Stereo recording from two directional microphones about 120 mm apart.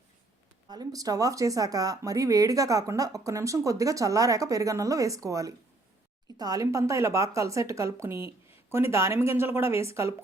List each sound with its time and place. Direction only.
0.7 s speech: 30° right (ahead or behind)